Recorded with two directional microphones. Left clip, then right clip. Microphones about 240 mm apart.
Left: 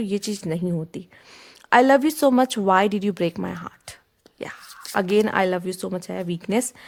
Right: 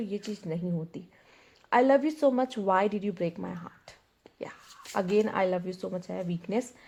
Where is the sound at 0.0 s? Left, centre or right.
Left.